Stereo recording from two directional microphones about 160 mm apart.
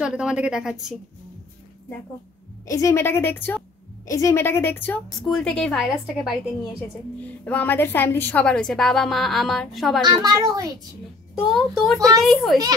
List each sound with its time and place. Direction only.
0.0 s a woman's voice: 5° right (ahead or behind)
2.6 s a woman's voice: 20° left (ahead or behind); by 10.0 s centre (ahead or behind)
10.0 s a child's voice: 25° right (ahead or behind)
11.4 s a woman's voice: centre (ahead or behind)